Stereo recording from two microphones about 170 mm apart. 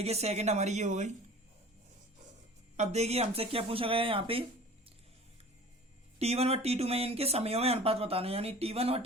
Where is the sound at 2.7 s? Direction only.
40° right (ahead or behind).